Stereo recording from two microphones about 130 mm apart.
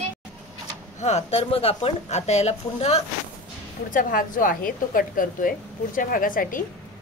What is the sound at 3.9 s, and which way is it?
A woman's voice, 90° left.